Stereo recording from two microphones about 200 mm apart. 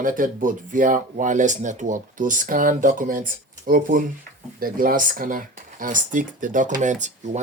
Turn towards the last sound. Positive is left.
turn(degrees=-35)  # may be behind; listen again after turning